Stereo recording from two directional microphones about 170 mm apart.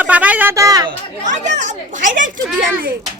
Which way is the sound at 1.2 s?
45° right (ahead or behind).